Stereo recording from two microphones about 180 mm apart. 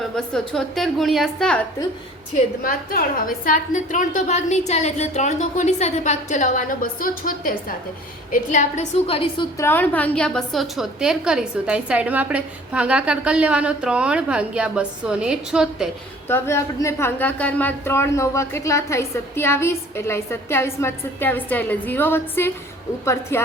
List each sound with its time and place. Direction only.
0.0 s a woman's voice: 5° left (ahead or behind)
2.3 s a woman's voice: 50° left (ahead or behind); by 9.5 s 30° left (ahead or behind)
9.6 s a woman's voice: 10° left (ahead or behind); by 15.9 s 5° right (ahead or behind)
16.3 s speech: 15° left (ahead or behind)